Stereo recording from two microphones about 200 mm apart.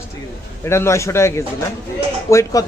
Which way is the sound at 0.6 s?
15° left (ahead or behind).